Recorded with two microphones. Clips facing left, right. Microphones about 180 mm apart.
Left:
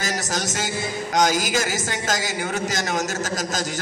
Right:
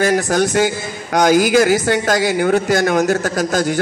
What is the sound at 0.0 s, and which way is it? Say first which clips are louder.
A man's voice: right 12 dB; 55° right (ahead or behind).